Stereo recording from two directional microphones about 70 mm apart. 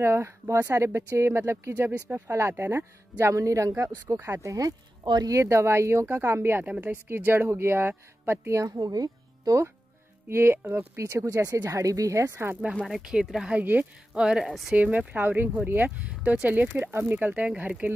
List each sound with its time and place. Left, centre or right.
0.0 s speech: right
5.3 s speech: right
8.7 s speech: right
10.2 s speech: right
11.1 s speech: right
12.8 s speech: centre
13.5 s speech: right
14.1 s speech: centre
14.4 s speech: centre
14.8 s speech: right